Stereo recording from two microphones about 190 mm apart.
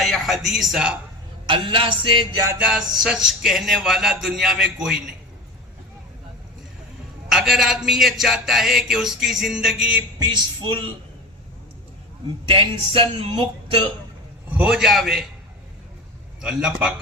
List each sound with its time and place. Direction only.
0.0 s a man's voice: centre (ahead or behind)
1.5 s speech: 25° right (ahead or behind)
2.6 s a man's voice: 5° right (ahead or behind)
7.3 s a man's voice: centre (ahead or behind)
10.2 s speech: 25° right (ahead or behind)
12.5 s speech: 30° right (ahead or behind)
14.5 s a man's voice: 5° right (ahead or behind)
16.4 s a man's voice: 5° right (ahead or behind)